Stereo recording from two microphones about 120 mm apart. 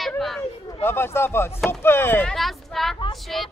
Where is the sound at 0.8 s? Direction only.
20° left (ahead or behind).